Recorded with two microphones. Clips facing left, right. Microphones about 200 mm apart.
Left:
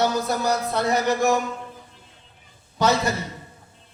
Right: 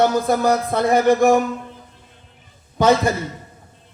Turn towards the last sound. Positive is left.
turn(degrees=-55)  # may be behind; listen again after turning